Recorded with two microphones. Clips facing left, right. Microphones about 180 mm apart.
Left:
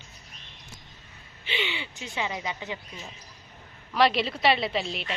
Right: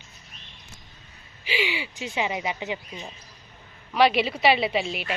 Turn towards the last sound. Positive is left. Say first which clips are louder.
# right 3 dB
turn(degrees=-5)  # may be behind; listen again after turning